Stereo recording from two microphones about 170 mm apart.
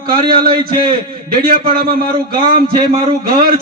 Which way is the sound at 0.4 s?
60° right (ahead or behind).